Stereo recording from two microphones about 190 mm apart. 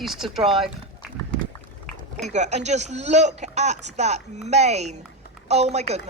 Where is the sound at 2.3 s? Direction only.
40° right (ahead or behind).